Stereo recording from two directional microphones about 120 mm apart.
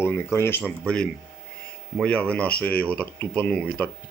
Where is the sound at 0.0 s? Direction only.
20° left (ahead or behind).